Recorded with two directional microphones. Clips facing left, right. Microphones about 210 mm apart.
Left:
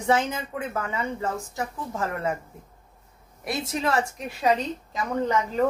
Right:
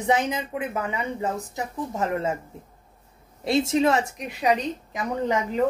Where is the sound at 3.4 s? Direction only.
25° right (ahead or behind).